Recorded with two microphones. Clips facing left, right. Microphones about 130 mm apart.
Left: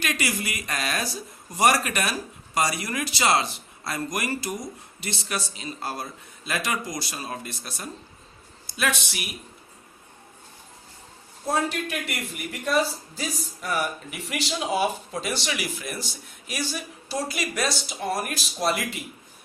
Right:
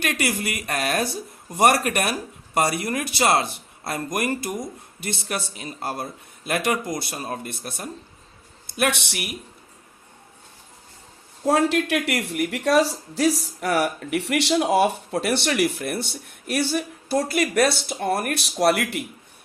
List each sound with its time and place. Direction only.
0.0 s a man's voice: 55° right (ahead or behind)
11.4 s speech: 90° right; by 19.0 s 70° right (ahead or behind)